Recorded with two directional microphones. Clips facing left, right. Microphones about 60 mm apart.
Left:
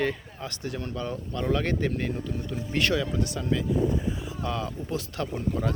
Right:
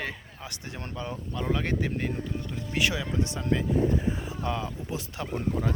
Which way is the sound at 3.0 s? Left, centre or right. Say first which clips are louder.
Left 1 dB; right.